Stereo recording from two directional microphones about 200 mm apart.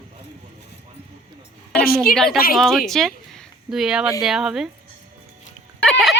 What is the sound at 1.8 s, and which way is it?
Speech, 50° left (ahead or behind).